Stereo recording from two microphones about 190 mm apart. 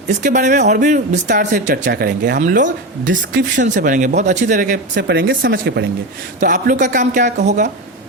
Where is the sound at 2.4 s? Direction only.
40° right (ahead or behind).